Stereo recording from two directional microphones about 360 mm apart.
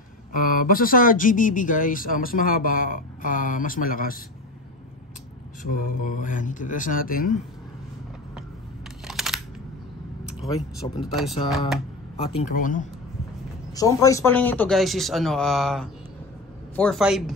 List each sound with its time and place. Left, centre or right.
0.5 s speech: left
5.6 s speech: left
9.0 s camera: centre
10.4 s speech: centre
11.0 s a man's voice: centre
12.2 s speech: centre
13.7 s a man's voice: centre